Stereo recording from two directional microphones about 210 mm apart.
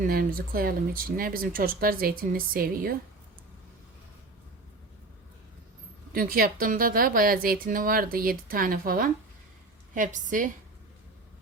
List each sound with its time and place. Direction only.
0.1 s speech: 45° right (ahead or behind)
6.1 s a woman's voice: 45° right (ahead or behind)